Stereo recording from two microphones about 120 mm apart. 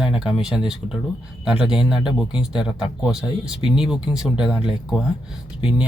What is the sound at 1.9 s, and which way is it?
Speech, 40° left (ahead or behind).